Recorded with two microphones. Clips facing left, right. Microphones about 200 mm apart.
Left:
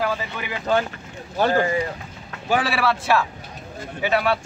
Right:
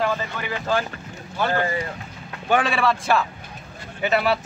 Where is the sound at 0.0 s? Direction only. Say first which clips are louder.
Right 1 dB; 5° left (ahead or behind).